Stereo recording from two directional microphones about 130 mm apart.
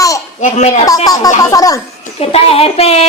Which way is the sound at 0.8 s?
30° left (ahead or behind).